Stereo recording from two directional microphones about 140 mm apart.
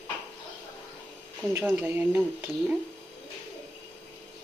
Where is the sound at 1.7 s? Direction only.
15° right (ahead or behind).